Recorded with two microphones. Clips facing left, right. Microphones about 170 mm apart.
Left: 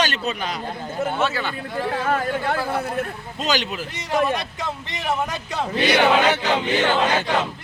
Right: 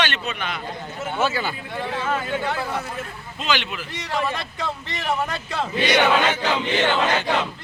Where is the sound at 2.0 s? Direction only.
55° left (ahead or behind).